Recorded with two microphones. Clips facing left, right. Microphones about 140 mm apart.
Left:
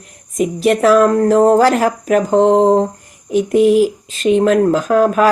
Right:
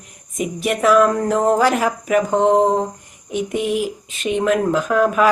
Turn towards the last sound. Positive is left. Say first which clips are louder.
# left 4 dB
turn(degrees=35)  # may be behind; listen again after turning